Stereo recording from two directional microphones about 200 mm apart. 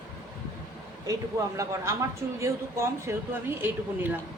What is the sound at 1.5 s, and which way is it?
Speech, 15° right (ahead or behind).